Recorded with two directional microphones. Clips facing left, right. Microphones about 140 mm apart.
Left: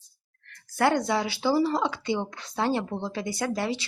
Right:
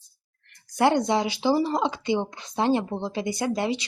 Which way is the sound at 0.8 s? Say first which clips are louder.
Right 3 dB; 20° right (ahead or behind).